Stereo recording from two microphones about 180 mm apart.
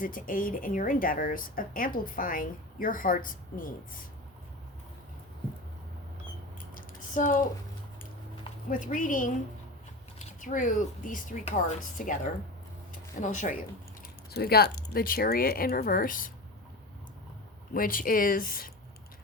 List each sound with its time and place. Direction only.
0.0 s speech: 50° left (ahead or behind)
6.7 s typing: 45° left (ahead or behind)
8.7 s speech: 45° left (ahead or behind)
10.4 s speech: 45° left (ahead or behind)
14.3 s speech: 60° left (ahead or behind)
17.7 s speech: 50° left (ahead or behind)